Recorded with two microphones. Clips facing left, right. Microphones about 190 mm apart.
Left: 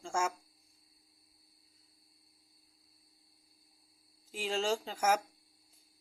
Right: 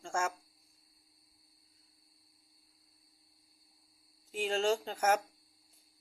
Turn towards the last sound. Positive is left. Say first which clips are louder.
# right 1 dB
turn(degrees=0)  # may be behind; listen again after turning